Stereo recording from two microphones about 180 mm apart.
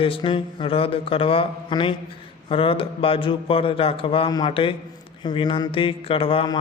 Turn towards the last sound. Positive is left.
turn(degrees=30)  # may be behind; listen again after turning